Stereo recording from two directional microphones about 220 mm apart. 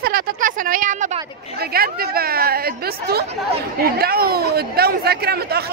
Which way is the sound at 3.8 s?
45° right (ahead or behind).